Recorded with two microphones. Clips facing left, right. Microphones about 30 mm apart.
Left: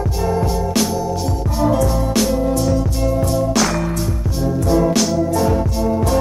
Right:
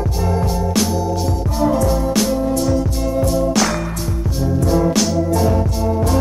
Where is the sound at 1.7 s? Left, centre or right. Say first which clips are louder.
Even; centre.